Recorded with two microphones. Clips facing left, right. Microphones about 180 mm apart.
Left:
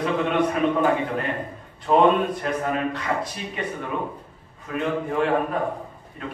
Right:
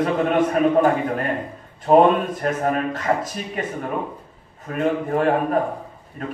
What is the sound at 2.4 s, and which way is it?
A man's voice, 45° right (ahead or behind).